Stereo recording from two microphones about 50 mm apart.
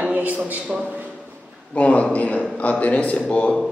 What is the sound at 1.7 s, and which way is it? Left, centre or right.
A man's voice, left.